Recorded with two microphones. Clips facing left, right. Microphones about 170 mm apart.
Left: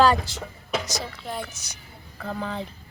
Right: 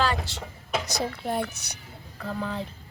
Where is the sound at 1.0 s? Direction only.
55° right (ahead or behind).